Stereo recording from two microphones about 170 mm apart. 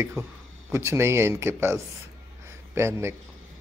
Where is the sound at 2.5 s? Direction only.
15° right (ahead or behind).